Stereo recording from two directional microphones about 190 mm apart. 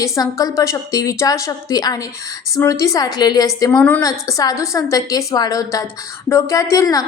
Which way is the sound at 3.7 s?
5° left (ahead or behind).